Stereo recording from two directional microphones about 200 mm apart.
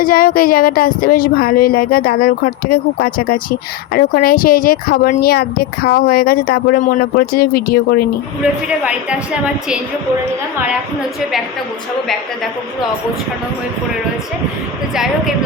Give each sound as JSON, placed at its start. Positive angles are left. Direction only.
{"t": 0.0, "sound": "speech", "side_deg": 45}
{"t": 8.8, "sound": "a woman's voice", "side_deg": -5}